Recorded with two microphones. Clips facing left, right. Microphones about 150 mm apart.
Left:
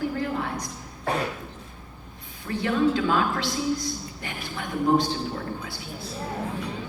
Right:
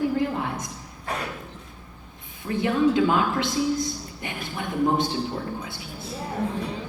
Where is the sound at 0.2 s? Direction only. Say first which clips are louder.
Right 2 dB; 20° right (ahead or behind).